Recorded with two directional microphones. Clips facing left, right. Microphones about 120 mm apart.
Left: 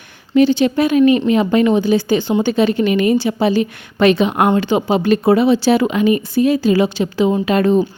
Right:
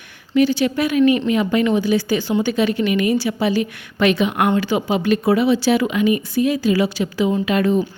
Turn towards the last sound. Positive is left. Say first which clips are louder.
# left 4 dB
turn(degrees=35)  # may be behind; listen again after turning